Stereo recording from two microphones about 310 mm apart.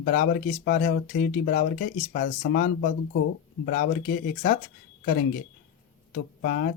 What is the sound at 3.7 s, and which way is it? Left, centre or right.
Speech, left.